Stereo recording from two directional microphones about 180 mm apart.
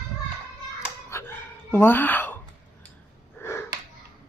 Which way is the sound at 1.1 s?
15° left (ahead or behind).